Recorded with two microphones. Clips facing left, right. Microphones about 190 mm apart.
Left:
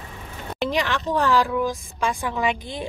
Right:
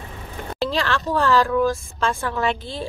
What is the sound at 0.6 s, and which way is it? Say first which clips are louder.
Speech: right 1 dB; 15° left (ahead or behind).